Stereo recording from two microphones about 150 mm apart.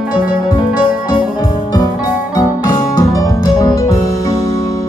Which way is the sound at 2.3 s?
25° left (ahead or behind).